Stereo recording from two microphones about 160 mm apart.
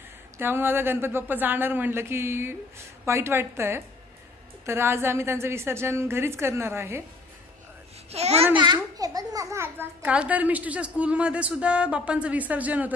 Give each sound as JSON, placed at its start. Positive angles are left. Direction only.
{"t": 0.4, "sound": "a child's voice", "side_deg": -15}
{"t": 8.1, "sound": "a child's voice", "side_deg": -40}
{"t": 8.9, "sound": "a child's voice", "side_deg": -25}